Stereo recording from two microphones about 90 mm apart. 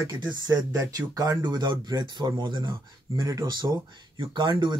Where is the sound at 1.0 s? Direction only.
40° right (ahead or behind); by 2.7 s 65° right (ahead or behind).